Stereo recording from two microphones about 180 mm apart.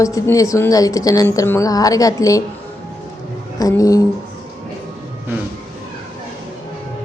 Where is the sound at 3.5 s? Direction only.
20° left (ahead or behind).